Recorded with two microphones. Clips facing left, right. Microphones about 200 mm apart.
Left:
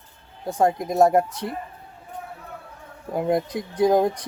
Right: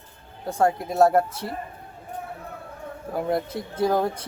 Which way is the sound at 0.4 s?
15° left (ahead or behind).